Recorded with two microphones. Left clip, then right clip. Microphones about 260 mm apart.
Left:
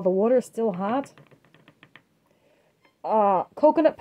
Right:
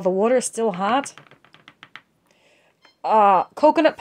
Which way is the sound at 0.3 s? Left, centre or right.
Centre.